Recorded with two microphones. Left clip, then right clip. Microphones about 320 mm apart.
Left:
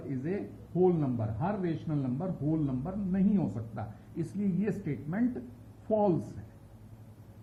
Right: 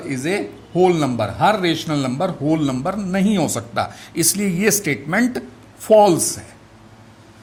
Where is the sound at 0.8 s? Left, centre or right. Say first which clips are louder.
Right 12 dB; right.